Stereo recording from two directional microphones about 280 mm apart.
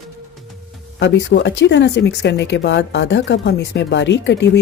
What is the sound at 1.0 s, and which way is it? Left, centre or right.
Speech, left.